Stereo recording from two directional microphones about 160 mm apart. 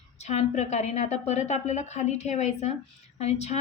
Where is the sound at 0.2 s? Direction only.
45° left (ahead or behind).